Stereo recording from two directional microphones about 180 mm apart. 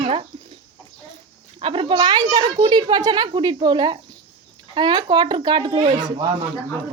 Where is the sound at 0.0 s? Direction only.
30° right (ahead or behind).